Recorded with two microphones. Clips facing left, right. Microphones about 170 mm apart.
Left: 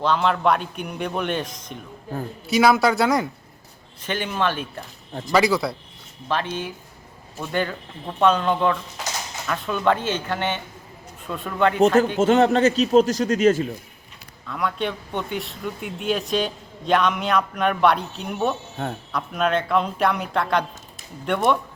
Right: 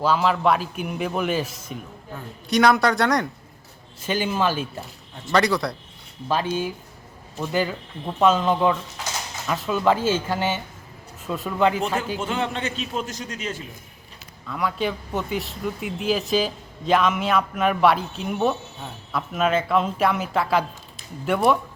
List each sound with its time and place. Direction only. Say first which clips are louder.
0.0 s speech: even; 5° right (ahead or behind)
4.0 s speech: right 1 dB; 10° right (ahead or behind)
5.3 s speech: left 1 dB; 5° left (ahead or behind)
6.2 s speech: right 2 dB; 10° right (ahead or behind)
12.2 s a man's voice: left 10 dB; 40° left (ahead or behind)
14.4 s speech: even; 5° right (ahead or behind)